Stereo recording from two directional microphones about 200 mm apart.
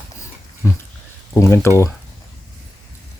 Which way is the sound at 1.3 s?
15° left (ahead or behind).